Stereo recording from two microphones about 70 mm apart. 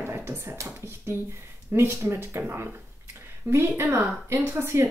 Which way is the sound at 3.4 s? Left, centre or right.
Right.